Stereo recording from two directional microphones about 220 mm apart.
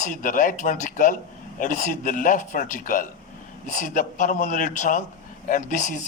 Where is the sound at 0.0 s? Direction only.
35° left (ahead or behind).